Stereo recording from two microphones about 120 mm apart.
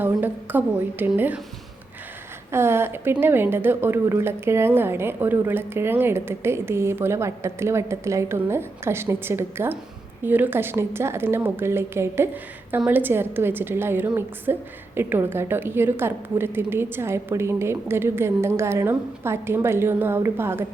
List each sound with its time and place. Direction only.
0.2 s a woman's voice: 15° right (ahead or behind)
2.5 s a woman's voice: 20° right (ahead or behind)